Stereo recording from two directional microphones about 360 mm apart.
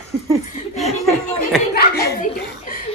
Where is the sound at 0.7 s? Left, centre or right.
Centre.